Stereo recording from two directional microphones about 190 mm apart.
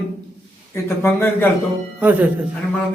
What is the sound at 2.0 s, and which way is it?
Speech, 10° right (ahead or behind).